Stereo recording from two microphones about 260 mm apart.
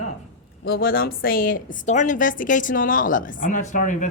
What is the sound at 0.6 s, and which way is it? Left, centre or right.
A woman's voice, left.